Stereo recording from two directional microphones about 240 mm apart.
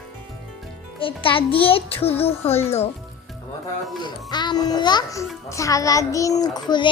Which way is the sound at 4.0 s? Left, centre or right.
Centre.